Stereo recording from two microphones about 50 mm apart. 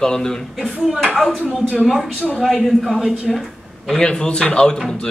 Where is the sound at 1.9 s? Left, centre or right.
Centre.